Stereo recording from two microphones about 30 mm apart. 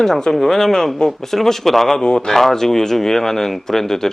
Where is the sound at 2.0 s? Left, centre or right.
Left.